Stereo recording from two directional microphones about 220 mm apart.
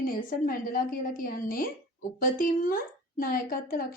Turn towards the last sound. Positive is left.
turn(degrees=40)  # may be behind; listen again after turning